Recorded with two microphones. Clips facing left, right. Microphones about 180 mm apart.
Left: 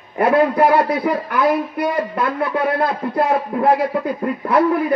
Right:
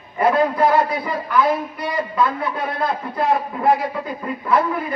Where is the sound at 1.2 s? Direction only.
65° left (ahead or behind).